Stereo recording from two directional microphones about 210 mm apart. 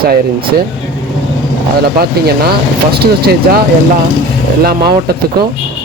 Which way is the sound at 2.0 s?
45° right (ahead or behind).